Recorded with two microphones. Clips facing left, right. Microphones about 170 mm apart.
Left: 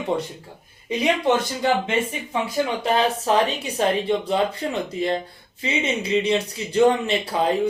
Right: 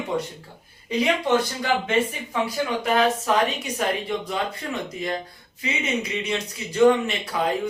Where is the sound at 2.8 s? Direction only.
30° left (ahead or behind).